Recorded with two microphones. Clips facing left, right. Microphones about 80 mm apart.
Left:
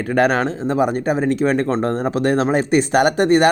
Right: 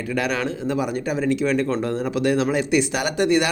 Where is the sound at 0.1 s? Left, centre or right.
Left.